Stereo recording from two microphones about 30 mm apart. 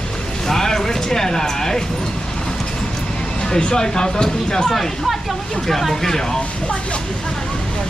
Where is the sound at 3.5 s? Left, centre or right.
Left.